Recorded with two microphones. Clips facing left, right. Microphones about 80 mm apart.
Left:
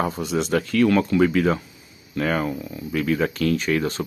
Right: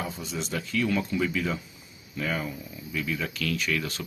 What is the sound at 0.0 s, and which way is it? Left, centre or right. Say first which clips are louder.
Speech: left 10 dB; left.